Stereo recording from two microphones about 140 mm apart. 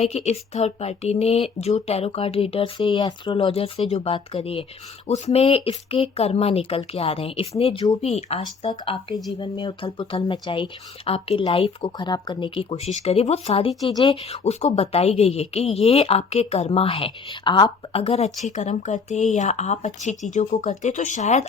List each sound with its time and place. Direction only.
0.0 s speech: 50° left (ahead or behind)
8.7 s speech: 40° left (ahead or behind)
18.0 s speech: 50° left (ahead or behind)